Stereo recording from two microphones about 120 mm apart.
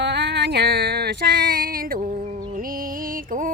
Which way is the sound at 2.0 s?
85° right.